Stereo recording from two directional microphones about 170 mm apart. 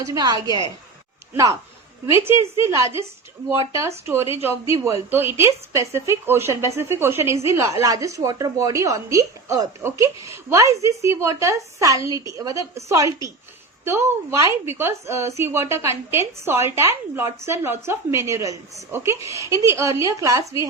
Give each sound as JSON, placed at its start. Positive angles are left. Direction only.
{"t": 0.0, "sound": "a woman's voice", "side_deg": -20}